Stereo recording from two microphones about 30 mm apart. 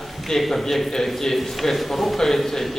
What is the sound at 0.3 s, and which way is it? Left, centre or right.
A man's voice, centre.